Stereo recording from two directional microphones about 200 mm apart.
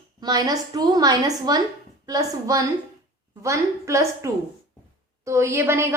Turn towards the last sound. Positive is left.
turn(degrees=-10)  # may be behind; listen again after turning